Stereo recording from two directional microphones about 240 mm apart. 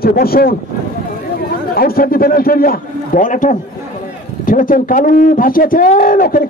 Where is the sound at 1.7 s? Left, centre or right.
Left.